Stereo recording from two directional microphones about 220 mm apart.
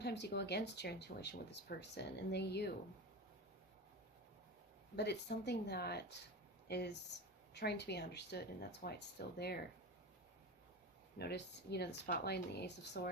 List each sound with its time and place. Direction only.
0.0 s speech: 50° left (ahead or behind)
4.9 s speech: 50° left (ahead or behind)
11.2 s speech: 50° left (ahead or behind)